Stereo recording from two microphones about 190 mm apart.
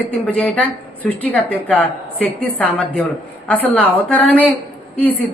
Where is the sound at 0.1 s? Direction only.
5° left (ahead or behind).